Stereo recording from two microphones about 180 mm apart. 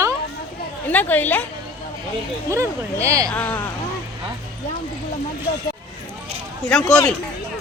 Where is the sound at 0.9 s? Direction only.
10° left (ahead or behind).